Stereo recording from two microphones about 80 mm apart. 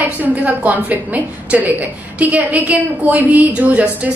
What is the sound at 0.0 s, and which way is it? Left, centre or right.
A woman's voice, centre.